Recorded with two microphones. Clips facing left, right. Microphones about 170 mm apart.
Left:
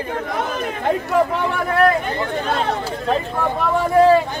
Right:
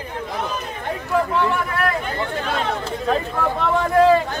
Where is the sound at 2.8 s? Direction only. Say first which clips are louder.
Left 1 dB; 10° left (ahead or behind).